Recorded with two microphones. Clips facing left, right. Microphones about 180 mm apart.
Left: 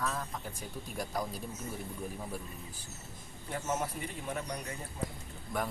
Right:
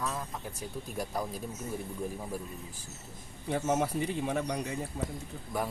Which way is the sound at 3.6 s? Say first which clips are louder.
Right 6 dB; 70° right (ahead or behind).